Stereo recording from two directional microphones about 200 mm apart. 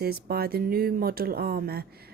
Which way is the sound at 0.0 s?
50° right (ahead or behind).